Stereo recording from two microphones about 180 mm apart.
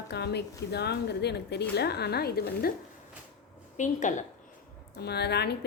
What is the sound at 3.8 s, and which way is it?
Speech, 45° left (ahead or behind).